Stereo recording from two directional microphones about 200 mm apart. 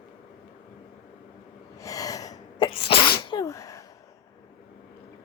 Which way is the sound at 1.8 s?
15° left (ahead or behind).